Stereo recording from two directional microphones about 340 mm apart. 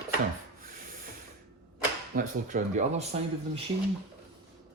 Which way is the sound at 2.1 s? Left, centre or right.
Right.